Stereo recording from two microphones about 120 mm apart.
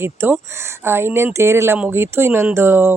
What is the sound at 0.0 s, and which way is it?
Speech, 20° right (ahead or behind).